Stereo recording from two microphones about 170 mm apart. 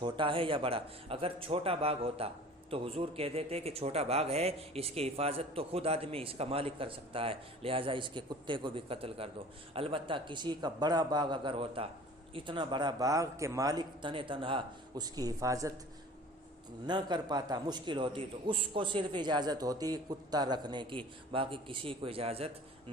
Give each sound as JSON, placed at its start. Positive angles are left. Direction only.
{"t": 0.0, "sound": "a man's voice", "side_deg": -30}
{"t": 16.8, "sound": "a man's voice", "side_deg": -25}